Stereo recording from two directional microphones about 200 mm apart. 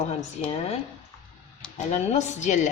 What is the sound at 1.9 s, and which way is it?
Speech, 35° left (ahead or behind).